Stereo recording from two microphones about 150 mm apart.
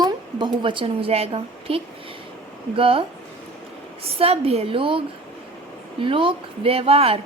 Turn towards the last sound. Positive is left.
turn(degrees=-40)  # may be behind; listen again after turning